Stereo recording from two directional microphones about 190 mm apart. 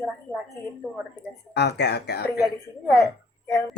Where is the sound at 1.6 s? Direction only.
60° left (ahead or behind).